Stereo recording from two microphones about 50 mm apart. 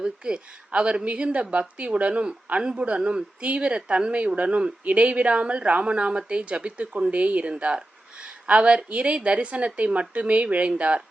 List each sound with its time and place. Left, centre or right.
0.0 s a woman's voice: right